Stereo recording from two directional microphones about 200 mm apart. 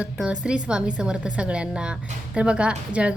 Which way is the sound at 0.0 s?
5° right (ahead or behind).